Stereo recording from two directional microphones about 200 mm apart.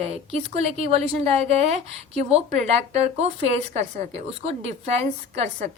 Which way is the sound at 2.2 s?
30° right (ahead or behind).